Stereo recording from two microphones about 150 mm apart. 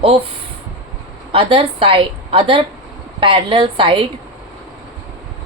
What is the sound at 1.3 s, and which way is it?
A woman's voice, 35° right (ahead or behind).